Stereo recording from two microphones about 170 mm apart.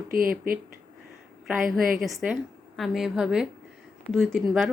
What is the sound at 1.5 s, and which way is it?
Speech, 55° right (ahead or behind).